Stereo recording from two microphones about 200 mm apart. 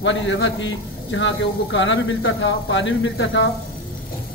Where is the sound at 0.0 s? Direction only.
65° left (ahead or behind).